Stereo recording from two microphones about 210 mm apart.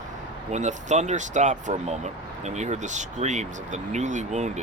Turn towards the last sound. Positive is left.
turn(degrees=-35)  # may be behind; listen again after turning